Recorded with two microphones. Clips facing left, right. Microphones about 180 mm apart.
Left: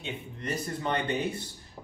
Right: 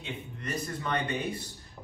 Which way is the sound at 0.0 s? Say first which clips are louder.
Left 2 dB; 30° left (ahead or behind).